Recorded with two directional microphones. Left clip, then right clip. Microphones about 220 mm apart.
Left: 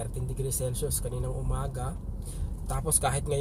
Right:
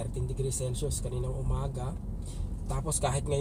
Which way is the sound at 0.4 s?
55° left (ahead or behind).